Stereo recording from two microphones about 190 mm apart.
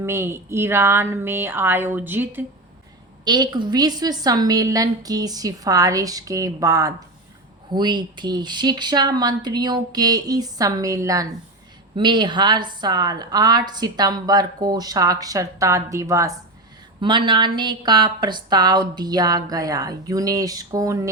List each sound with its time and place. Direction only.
0.0 s speech: 15° right (ahead or behind)
3.2 s a woman's voice: 20° right (ahead or behind)